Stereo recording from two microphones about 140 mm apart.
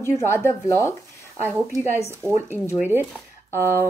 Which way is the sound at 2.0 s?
20° right (ahead or behind).